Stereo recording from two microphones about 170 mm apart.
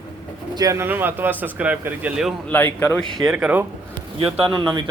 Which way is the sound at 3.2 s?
5° right (ahead or behind).